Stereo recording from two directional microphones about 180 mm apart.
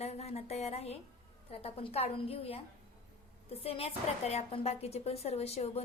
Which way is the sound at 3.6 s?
35° left (ahead or behind).